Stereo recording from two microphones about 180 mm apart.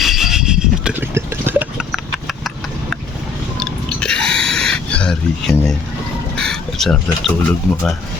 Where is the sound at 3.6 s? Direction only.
5° left (ahead or behind).